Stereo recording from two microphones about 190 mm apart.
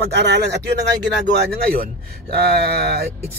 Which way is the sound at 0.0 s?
65° right (ahead or behind).